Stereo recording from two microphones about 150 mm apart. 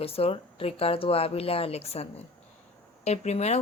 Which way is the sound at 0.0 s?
40° left (ahead or behind).